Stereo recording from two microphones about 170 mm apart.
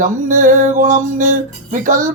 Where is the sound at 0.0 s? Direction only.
50° right (ahead or behind).